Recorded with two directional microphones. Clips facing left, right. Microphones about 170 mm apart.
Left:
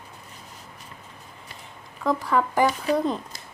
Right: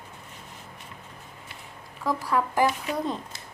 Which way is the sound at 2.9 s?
35° left (ahead or behind).